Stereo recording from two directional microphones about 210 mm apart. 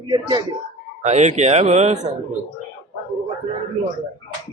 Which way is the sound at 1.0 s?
35° right (ahead or behind).